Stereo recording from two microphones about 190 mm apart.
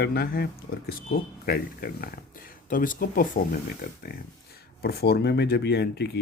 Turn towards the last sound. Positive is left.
turn(degrees=60)  # may be behind; listen again after turning